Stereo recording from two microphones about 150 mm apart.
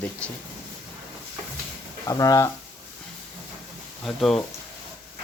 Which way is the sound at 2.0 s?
25° left (ahead or behind).